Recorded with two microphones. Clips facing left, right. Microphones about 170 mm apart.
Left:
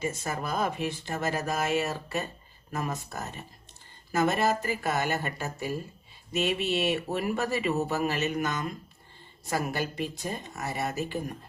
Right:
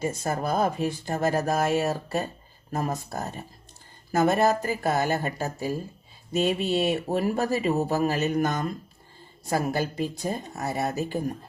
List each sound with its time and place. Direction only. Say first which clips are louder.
0.0 s speech: right 5 dB; 35° right (ahead or behind)